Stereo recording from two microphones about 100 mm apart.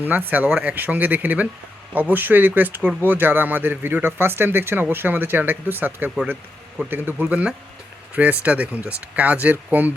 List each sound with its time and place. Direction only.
0.0 s speech: 20° right (ahead or behind)